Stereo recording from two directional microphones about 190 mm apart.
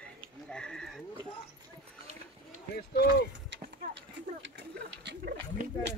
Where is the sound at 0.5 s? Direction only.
5° left (ahead or behind).